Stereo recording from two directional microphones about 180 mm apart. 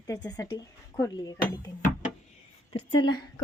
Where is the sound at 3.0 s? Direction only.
25° left (ahead or behind).